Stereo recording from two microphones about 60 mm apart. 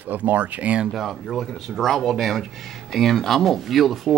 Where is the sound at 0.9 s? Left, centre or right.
Centre.